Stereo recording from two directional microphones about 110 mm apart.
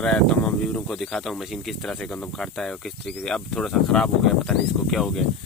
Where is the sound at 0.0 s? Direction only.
10° left (ahead or behind).